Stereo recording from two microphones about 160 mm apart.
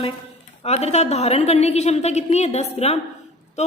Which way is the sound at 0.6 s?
40° left (ahead or behind).